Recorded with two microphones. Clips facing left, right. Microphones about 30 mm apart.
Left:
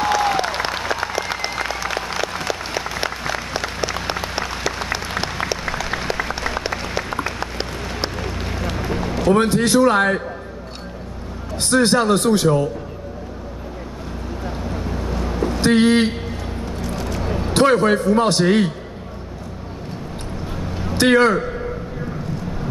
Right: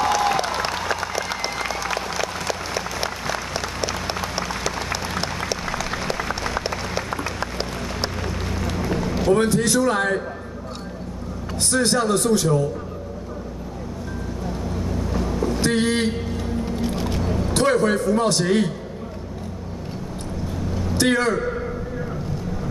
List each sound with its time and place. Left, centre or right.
0.1 s applause: left
7.3 s run: centre
9.3 s a man's voice: left
11.5 s a man's voice: left
14.4 s vehicle: left
17.2 s a sound: left
17.6 s a man's voice: left
20.6 s vehicle: left